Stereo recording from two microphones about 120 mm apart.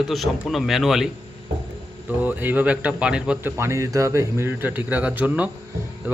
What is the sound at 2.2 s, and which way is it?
A man's voice, 15° right (ahead or behind).